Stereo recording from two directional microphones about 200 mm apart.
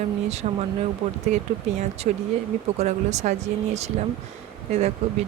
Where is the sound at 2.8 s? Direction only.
35° right (ahead or behind).